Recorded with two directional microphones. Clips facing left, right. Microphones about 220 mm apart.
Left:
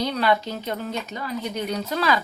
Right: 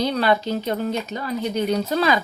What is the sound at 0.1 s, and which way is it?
Speech, 35° right (ahead or behind).